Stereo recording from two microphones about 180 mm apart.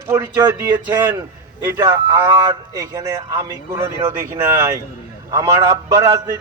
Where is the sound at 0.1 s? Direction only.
15° right (ahead or behind).